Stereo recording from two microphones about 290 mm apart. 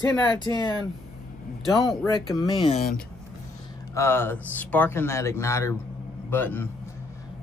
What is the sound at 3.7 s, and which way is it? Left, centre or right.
Speech, centre.